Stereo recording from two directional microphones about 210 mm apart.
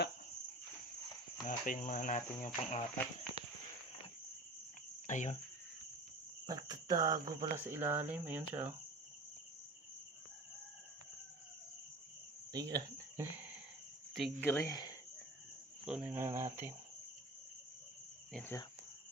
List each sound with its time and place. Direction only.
1.5 s cricket: 40° left (ahead or behind)
5.0 s cricket: 35° left (ahead or behind)
6.5 s speech: 20° right (ahead or behind)
12.5 s speech: 15° right (ahead or behind); by 14.9 s 15° left (ahead or behind)
15.9 s speech: 5° right (ahead or behind)
18.3 s speech: 10° left (ahead or behind)